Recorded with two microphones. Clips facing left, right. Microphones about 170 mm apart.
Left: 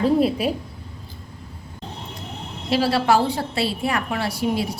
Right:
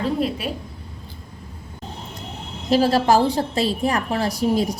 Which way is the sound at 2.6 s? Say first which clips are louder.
Right 2 dB; 40° right (ahead or behind).